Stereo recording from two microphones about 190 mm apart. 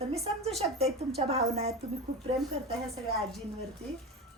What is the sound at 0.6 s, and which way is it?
Speech, 35° right (ahead or behind).